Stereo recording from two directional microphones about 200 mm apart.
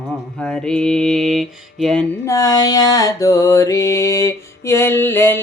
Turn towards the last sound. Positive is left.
turn(degrees=10)  # may be behind; listen again after turning